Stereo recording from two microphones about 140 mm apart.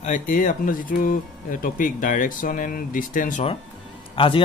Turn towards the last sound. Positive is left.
turn(degrees=40)  # may be behind; listen again after turning